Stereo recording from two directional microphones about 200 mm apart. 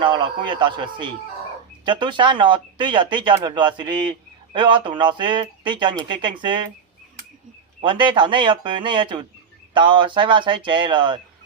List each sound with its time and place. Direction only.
0.0 s speech: 25° right (ahead or behind)
7.8 s speech: 25° right (ahead or behind)